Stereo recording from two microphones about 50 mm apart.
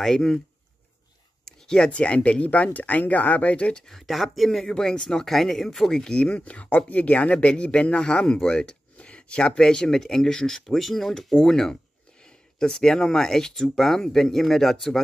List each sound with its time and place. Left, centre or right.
0.0 s speech: centre
1.4 s speech: centre
3.8 s speech: centre
6.3 s speech: left; by 15.0 s centre